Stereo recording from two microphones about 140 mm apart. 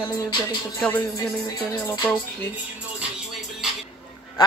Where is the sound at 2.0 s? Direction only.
5° left (ahead or behind).